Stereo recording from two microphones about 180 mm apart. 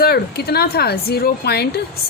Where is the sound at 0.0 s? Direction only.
60° left (ahead or behind).